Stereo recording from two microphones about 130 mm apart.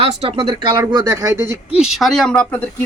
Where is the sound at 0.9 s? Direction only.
35° right (ahead or behind).